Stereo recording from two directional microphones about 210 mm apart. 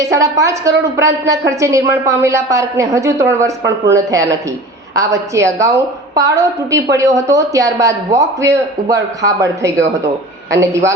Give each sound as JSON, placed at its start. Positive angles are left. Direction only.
{"t": 0.0, "sound": "a woman's voice", "side_deg": -15}